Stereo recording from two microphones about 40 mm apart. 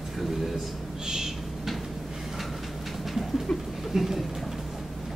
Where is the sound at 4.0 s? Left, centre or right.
Centre.